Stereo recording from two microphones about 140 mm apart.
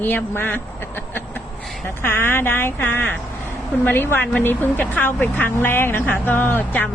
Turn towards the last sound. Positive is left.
turn(degrees=15)  # may be behind; listen again after turning